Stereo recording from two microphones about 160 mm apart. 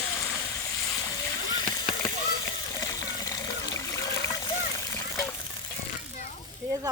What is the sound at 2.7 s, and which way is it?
Water, 20° left (ahead or behind).